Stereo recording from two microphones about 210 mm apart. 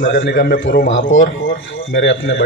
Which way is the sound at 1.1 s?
65° left (ahead or behind).